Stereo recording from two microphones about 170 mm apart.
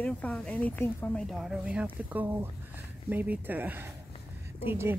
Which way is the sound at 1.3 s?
5° right (ahead or behind).